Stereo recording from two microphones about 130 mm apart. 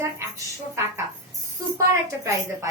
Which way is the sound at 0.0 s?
20° right (ahead or behind).